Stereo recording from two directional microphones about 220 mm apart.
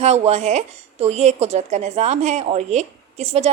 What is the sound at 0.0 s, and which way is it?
A woman's voice, 30° right (ahead or behind).